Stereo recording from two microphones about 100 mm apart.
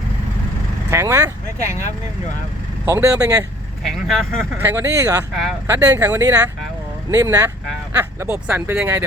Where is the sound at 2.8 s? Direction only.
30° right (ahead or behind).